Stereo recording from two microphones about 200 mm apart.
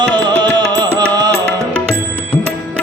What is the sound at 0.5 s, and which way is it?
Music, 20° right (ahead or behind).